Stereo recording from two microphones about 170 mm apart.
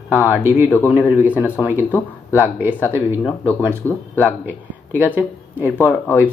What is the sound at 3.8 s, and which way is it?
Speech, 10° left (ahead or behind).